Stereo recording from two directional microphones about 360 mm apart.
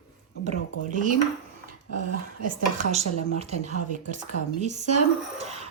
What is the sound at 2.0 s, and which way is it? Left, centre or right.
Speech, right.